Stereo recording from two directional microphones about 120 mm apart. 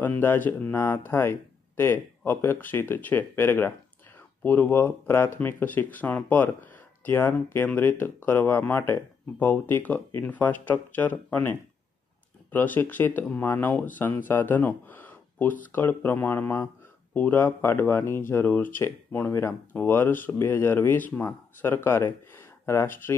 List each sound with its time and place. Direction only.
0.0 s speech: 15° left (ahead or behind)
12.5 s speech: 15° left (ahead or behind)